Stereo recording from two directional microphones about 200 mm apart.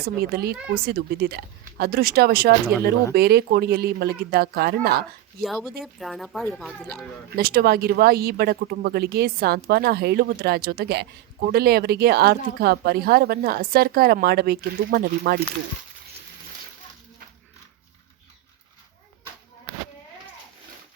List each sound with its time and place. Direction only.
0.2 s speech: 50° right (ahead or behind)
5.4 s speech: centre (ahead or behind)
7.3 s speech: 50° right (ahead or behind)